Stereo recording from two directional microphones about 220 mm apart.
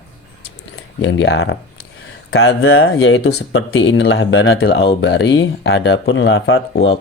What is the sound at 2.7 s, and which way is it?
Speech, 70° left (ahead or behind).